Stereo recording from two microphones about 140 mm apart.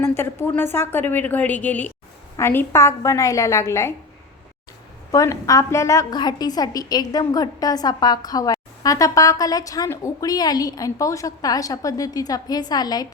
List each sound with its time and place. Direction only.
0.0 s a woman's voice: 20° left (ahead or behind)
5.1 s a woman's voice: 25° left (ahead or behind)